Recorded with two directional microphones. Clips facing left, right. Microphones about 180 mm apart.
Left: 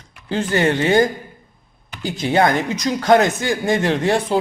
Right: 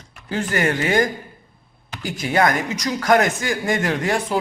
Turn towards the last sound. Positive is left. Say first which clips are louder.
# left 4 dB
turn(degrees=25)  # may be behind; listen again after turning